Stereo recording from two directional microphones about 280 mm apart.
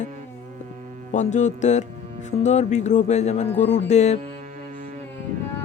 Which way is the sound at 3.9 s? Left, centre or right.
Left.